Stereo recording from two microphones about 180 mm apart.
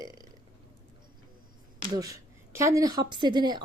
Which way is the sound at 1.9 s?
20° right (ahead or behind).